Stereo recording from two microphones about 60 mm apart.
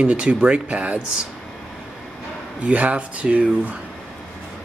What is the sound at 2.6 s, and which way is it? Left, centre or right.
Speech, right.